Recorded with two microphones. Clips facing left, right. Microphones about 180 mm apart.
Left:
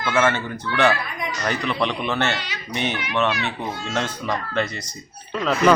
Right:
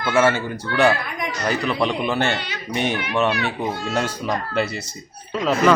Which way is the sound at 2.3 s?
50° right (ahead or behind).